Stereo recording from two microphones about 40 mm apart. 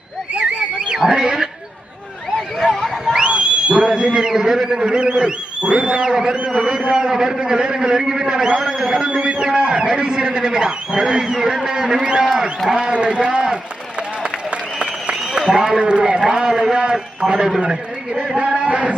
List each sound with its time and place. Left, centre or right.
0.3 s a sound: right
1.1 s a man's voice: right
2.6 s neigh: centre
3.2 s a sound: right
4.3 s a man's voice: centre
6.3 s a man's voice: right
6.6 s a man's voice: centre
12.2 s a man's voice: centre
14.8 s a sound: right
15.8 s a man's voice: right